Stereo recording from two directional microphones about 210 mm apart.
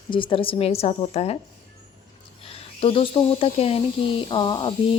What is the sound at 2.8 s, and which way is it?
A woman's voice, 25° left (ahead or behind).